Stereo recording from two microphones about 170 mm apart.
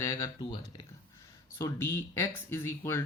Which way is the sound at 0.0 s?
20° left (ahead or behind).